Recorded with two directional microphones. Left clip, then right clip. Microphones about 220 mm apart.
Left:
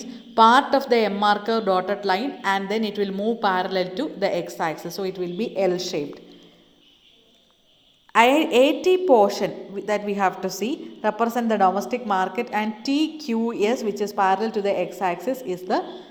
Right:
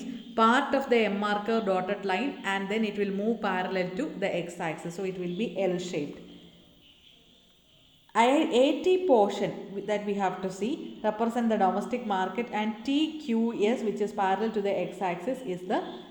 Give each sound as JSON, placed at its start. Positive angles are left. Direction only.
{"t": 0.3, "sound": "a woman's voice", "side_deg": 20}
{"t": 8.1, "sound": "a woman's voice", "side_deg": 20}